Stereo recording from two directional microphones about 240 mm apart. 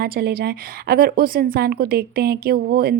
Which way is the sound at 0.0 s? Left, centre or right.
Right.